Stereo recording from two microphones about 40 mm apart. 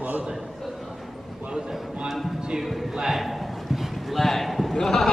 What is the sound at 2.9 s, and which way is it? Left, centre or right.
Speech, centre.